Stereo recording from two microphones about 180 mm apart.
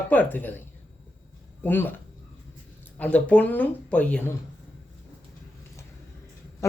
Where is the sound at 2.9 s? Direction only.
5° left (ahead or behind).